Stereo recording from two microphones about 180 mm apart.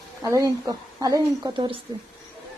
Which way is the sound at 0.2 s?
15° right (ahead or behind).